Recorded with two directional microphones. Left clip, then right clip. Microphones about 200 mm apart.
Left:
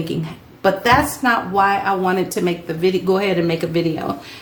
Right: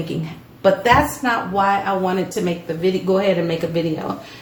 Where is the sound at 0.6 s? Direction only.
25° left (ahead or behind); by 3.5 s 45° left (ahead or behind).